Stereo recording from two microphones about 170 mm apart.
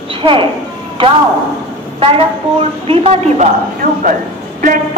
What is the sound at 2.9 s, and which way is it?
Speech, 35° right (ahead or behind).